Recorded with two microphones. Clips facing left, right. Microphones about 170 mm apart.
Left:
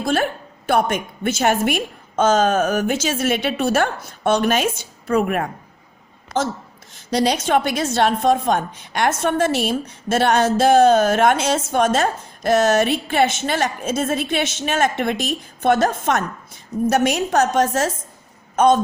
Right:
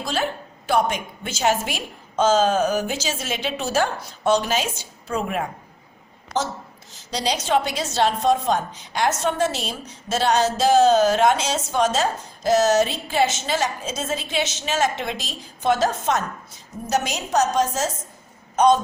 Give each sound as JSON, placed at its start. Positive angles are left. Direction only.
{"t": 0.0, "sound": "a woman's voice", "side_deg": 55}
{"t": 6.9, "sound": "a woman's voice", "side_deg": 55}